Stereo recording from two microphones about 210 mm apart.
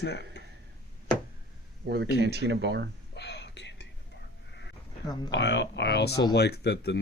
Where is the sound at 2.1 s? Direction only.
50° right (ahead or behind).